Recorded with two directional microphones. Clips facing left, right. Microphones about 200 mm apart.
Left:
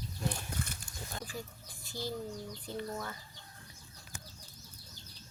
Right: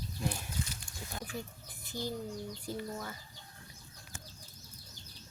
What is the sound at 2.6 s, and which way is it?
Speech, 10° right (ahead or behind).